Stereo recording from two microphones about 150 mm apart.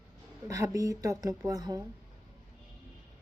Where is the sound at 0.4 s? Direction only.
20° right (ahead or behind).